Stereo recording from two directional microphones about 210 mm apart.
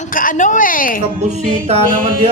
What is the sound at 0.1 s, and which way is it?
Speech, 40° left (ahead or behind).